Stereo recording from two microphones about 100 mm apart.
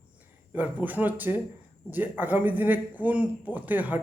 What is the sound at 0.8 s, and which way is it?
A man's voice, 15° right (ahead or behind).